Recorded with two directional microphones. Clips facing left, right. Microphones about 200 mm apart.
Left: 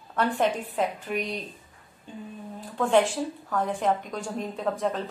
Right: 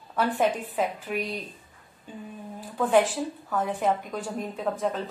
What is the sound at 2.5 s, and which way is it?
A woman's voice, 5° right (ahead or behind).